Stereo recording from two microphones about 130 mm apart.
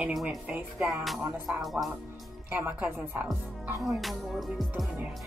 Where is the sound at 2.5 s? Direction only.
15° right (ahead or behind).